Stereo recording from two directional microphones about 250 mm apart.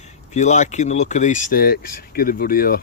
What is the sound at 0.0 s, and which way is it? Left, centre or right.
Speech, left.